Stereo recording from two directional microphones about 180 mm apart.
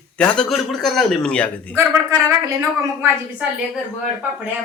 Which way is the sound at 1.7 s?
15° right (ahead or behind).